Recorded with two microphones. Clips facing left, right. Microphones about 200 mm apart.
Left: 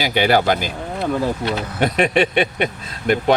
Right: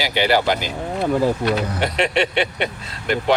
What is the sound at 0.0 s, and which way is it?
Speech, 50° left (ahead or behind).